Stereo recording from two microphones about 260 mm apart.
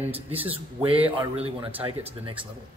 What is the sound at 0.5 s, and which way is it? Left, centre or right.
Speech, right.